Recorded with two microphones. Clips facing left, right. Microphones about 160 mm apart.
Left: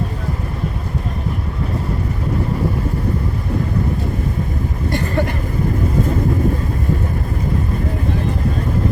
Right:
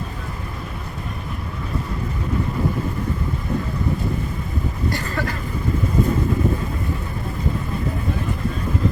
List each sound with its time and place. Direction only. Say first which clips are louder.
4.9 s vehicle: left 8 dB; 20° left (ahead or behind)